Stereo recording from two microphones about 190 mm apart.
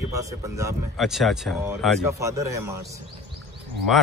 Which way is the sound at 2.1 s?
15° right (ahead or behind).